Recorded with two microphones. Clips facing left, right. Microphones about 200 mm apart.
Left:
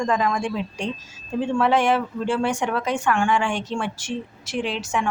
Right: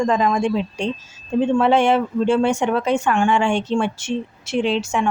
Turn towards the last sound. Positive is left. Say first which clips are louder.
# right 5 dB
turn(degrees=-25)  # may be behind; listen again after turning